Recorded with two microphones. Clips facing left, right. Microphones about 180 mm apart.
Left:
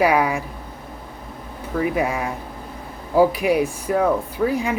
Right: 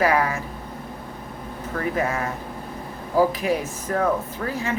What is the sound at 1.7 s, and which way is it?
Speech, 10° left (ahead or behind).